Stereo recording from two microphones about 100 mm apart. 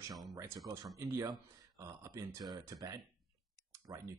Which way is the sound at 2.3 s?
35° right (ahead or behind).